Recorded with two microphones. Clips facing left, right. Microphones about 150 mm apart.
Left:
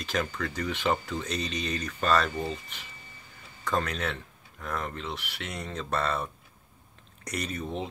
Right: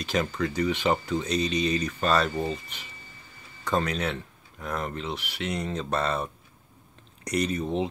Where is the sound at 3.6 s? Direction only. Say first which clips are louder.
Right 3 dB; 15° right (ahead or behind).